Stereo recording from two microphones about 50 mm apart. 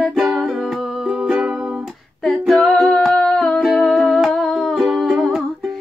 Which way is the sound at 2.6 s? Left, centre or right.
Centre.